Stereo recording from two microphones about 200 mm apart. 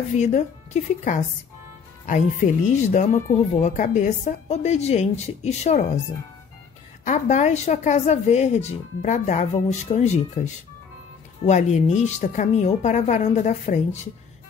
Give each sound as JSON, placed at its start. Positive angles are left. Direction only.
{"t": 0.1, "sound": "speech", "side_deg": 35}
{"t": 2.0, "sound": "speech", "side_deg": 40}
{"t": 7.1, "sound": "speech", "side_deg": 35}